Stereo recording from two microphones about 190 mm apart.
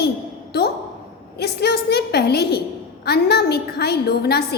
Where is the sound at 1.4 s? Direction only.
60° left (ahead or behind).